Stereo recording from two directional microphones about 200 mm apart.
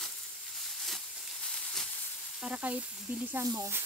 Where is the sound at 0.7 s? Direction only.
Centre (ahead or behind).